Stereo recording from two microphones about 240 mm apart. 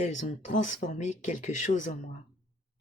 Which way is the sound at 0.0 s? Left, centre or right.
Left.